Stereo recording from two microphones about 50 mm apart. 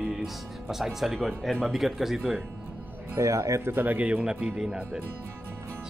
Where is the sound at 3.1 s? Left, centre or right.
Right.